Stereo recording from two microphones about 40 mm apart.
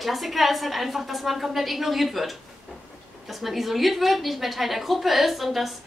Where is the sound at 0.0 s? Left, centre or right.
Centre.